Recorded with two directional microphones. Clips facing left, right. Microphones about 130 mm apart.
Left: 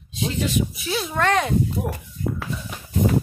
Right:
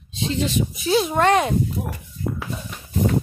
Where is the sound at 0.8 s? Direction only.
25° right (ahead or behind).